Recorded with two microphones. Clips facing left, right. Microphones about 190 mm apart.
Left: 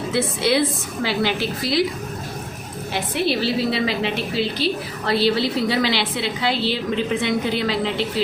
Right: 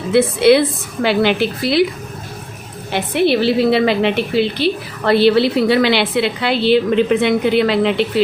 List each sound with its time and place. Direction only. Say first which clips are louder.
0.1 s a woman's voice: right 10 dB; 65° right (ahead or behind)
2.9 s a woman's voice: right 7 dB; 60° right (ahead or behind)